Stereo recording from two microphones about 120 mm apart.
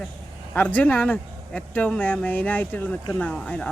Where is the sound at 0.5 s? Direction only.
15° left (ahead or behind).